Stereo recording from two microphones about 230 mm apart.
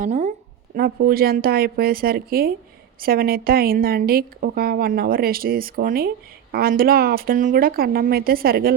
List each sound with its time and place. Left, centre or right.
0.0 s a woman's voice: right
0.8 s a woman's voice: right